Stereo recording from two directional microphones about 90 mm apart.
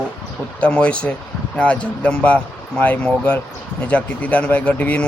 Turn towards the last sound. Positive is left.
turn(degrees=15)  # may be behind; listen again after turning